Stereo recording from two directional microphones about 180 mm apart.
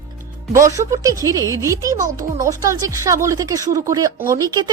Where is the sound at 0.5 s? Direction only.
15° right (ahead or behind).